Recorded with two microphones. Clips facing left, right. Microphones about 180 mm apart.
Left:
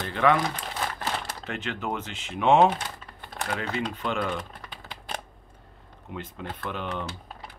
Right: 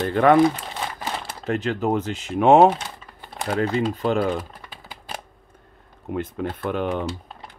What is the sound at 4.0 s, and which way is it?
Speech, 40° right (ahead or behind).